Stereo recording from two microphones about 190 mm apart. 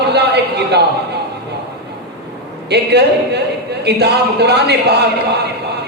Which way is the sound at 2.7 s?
60° right (ahead or behind).